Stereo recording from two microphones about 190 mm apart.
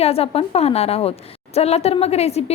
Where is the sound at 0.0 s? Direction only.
30° left (ahead or behind).